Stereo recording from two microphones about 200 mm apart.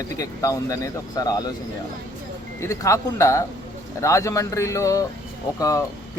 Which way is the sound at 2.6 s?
15° left (ahead or behind).